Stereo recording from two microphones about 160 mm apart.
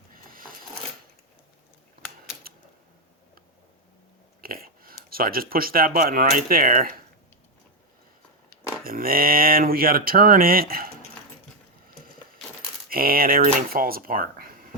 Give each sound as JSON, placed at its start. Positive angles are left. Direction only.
{"t": 0.1, "sound": "a sound", "side_deg": -60}
{"t": 4.4, "sound": "speech", "side_deg": -65}
{"t": 8.8, "sound": "speech", "side_deg": -65}
{"t": 12.9, "sound": "speech", "side_deg": -65}